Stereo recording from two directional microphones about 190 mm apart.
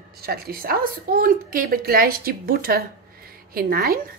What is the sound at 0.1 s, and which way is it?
A woman's voice, 55° right (ahead or behind).